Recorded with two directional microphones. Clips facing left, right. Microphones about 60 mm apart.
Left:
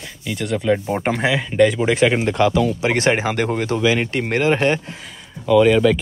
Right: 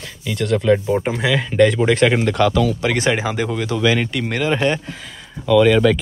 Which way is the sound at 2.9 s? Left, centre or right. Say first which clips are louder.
Left 1 dB; left.